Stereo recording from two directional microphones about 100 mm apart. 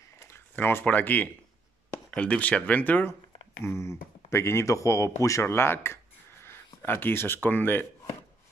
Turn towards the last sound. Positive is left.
turn(degrees=15)  # may be behind; listen again after turning